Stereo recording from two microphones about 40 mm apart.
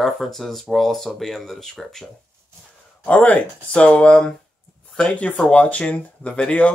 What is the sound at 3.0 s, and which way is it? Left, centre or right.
Speech, left.